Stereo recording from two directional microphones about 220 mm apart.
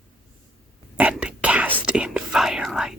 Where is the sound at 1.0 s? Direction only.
5° right (ahead or behind).